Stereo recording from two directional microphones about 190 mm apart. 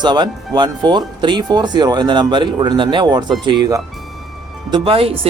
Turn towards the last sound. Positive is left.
turn(degrees=-30)  # may be behind; listen again after turning